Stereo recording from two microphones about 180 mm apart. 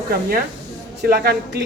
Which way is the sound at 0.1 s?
55° right (ahead or behind).